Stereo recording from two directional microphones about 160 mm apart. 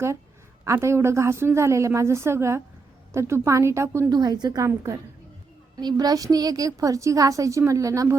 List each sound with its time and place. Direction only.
0.6 s a woman's voice: 15° right (ahead or behind)